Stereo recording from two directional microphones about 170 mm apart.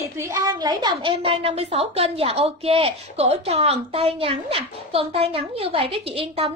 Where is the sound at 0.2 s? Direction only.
20° right (ahead or behind).